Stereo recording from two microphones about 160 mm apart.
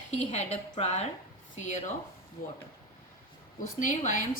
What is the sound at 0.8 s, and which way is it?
Speech, 40° left (ahead or behind).